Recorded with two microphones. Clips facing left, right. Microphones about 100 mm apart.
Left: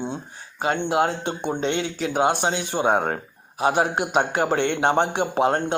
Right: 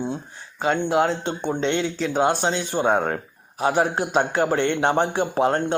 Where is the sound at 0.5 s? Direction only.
55° left (ahead or behind).